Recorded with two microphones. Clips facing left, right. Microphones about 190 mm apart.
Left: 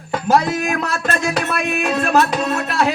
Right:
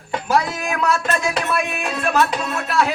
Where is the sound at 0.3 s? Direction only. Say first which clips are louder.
Left 4 dB; 45° left (ahead or behind).